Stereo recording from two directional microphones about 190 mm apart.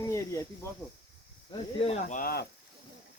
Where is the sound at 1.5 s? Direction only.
30° left (ahead or behind); by 2.4 s 50° left (ahead or behind).